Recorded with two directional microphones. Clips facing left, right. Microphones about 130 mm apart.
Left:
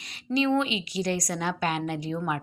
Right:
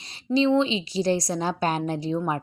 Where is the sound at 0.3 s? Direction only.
30° right (ahead or behind).